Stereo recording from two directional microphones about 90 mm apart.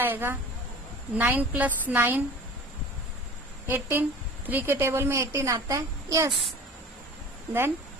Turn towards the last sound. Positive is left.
turn(degrees=-25)  # may be behind; listen again after turning